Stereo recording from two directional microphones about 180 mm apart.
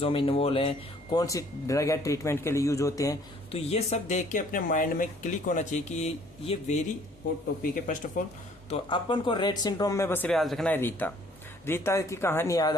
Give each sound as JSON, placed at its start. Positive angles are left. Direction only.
{"t": 0.0, "sound": "speech", "side_deg": 30}
{"t": 1.2, "sound": "speech", "side_deg": 20}
{"t": 3.5, "sound": "speech", "side_deg": 35}
{"t": 7.6, "sound": "speech", "side_deg": 45}
{"t": 8.7, "sound": "speech", "side_deg": 25}